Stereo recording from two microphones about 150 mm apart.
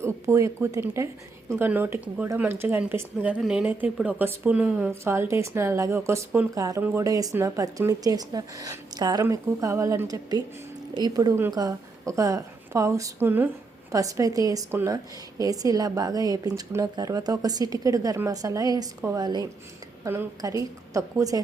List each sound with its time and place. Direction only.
0.0 s a woman's voice: 20° right (ahead or behind)